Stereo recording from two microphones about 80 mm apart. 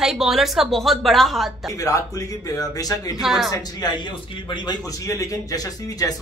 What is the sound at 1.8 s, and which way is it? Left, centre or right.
A man's voice, left.